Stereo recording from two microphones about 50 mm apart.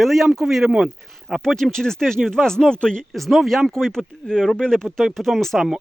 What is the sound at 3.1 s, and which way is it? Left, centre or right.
Speech, centre.